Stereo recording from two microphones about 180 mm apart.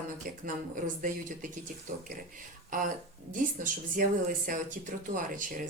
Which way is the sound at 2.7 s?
45° right (ahead or behind).